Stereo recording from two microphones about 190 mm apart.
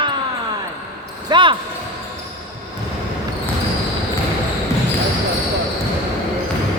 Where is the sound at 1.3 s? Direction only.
25° right (ahead or behind).